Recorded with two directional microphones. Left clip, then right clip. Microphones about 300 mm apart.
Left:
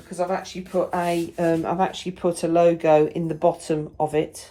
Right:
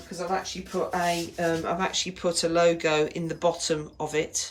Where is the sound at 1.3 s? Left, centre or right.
Centre.